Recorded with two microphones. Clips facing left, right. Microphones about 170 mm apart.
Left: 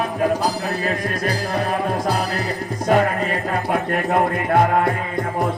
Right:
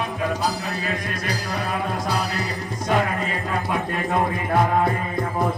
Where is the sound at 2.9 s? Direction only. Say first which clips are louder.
Left 5 dB; 50° left (ahead or behind).